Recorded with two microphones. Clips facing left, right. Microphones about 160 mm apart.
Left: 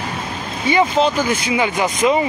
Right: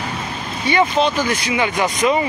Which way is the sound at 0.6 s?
15° left (ahead or behind).